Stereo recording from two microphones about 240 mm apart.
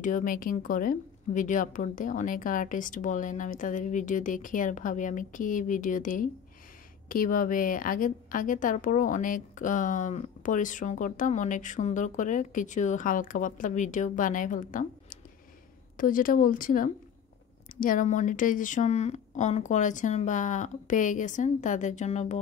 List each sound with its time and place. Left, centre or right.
0.0 s a woman's voice: left